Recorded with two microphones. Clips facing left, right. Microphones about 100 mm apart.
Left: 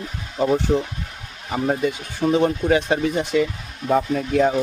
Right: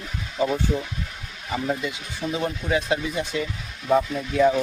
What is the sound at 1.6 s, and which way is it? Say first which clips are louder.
Speech: left 7 dB; 50° left (ahead or behind).